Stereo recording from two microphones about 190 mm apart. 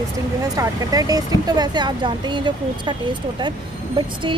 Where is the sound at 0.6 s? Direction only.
20° right (ahead or behind).